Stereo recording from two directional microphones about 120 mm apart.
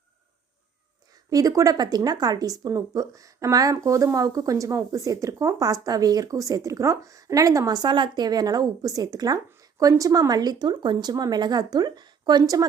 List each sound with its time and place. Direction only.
1.1 s speech: 30° right (ahead or behind)